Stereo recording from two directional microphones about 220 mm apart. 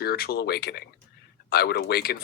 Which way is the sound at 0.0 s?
45° left (ahead or behind).